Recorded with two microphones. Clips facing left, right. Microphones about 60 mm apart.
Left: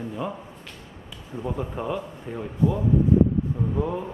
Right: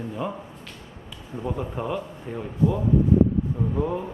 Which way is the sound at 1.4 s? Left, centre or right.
Centre.